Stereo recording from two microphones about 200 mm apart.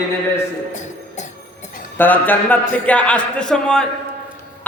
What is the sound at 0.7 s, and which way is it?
Music, 35° left (ahead or behind).